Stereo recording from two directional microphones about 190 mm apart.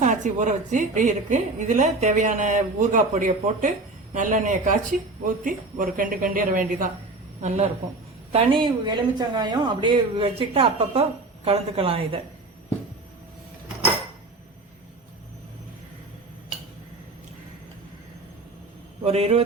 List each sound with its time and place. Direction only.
0.0 s a woman's voice: 40° right (ahead or behind)
19.0 s a woman's voice: 30° right (ahead or behind)